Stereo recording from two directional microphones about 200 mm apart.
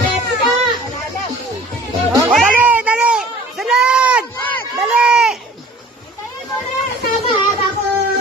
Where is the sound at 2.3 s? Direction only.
5° right (ahead or behind).